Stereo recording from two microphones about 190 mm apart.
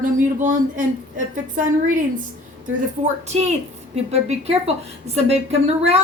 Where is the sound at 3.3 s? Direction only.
35° right (ahead or behind).